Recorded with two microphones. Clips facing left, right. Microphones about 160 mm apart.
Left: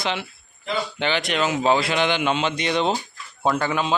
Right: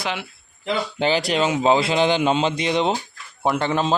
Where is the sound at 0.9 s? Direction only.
35° right (ahead or behind); by 3.7 s 20° right (ahead or behind).